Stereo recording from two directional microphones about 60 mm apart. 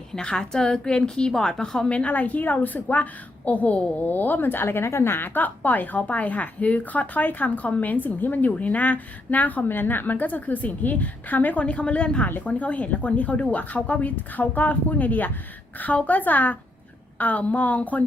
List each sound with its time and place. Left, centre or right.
0.1 s a woman's voice: centre